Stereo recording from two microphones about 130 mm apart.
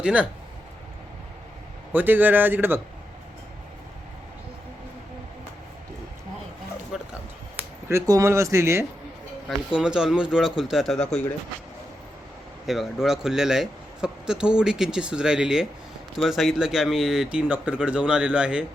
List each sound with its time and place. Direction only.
0.0 s a man's voice: 10° right (ahead or behind)
1.9 s a man's voice: 15° right (ahead or behind)
6.9 s a sound: 5° right (ahead or behind)
7.9 s speech: 25° right (ahead or behind)
9.6 s a man's voice: 10° right (ahead or behind)
12.6 s speech: centre (ahead or behind)